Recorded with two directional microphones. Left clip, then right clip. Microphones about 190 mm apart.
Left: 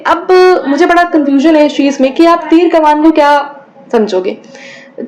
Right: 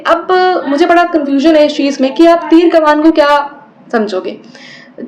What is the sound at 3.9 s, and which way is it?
Speech, 25° left (ahead or behind).